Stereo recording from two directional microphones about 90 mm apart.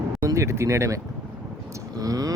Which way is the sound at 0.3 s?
35° right (ahead or behind).